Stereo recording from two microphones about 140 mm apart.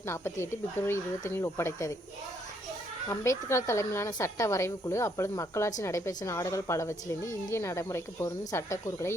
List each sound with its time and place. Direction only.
0.1 s a woman's voice: 15° left (ahead or behind)
3.1 s a woman's voice: 20° left (ahead or behind)